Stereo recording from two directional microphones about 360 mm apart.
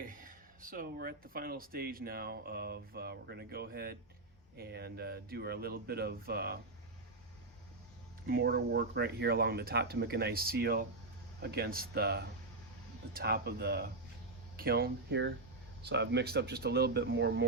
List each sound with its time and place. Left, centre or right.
0.0 s speech: right
8.3 s speech: right